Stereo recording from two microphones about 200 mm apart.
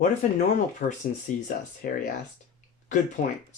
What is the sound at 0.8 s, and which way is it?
Speech, 45° left (ahead or behind).